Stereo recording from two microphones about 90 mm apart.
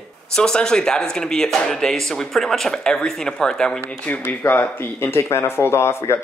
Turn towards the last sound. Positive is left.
turn(degrees=30)  # may be behind; listen again after turning